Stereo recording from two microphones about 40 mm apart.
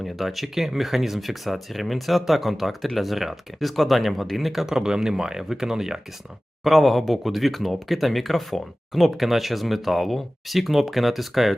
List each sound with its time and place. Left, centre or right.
0.0 s speech: centre
4.6 s speech: centre
6.7 s speech: centre